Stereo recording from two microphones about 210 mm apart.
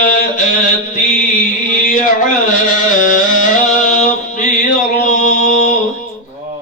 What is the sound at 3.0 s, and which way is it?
Music, 40° left (ahead or behind).